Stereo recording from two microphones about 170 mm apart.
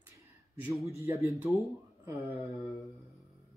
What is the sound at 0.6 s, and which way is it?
Speech, 10° right (ahead or behind).